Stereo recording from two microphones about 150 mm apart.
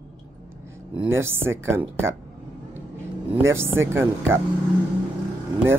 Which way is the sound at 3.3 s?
15° right (ahead or behind).